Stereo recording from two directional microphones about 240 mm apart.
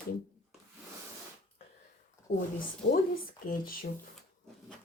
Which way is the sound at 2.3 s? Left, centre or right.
Left.